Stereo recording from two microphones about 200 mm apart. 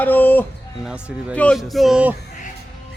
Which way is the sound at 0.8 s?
5° right (ahead or behind).